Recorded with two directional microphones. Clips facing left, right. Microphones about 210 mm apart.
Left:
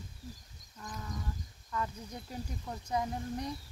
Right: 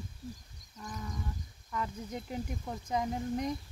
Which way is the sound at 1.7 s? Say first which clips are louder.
Right 1 dB; 20° right (ahead or behind).